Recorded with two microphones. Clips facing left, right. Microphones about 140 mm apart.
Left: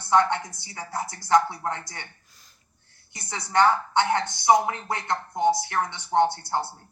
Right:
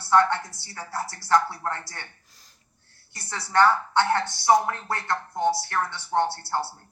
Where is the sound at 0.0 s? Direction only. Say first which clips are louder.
Right 1 dB; 15° left (ahead or behind).